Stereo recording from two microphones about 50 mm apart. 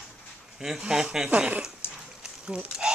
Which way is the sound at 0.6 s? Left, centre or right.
Centre.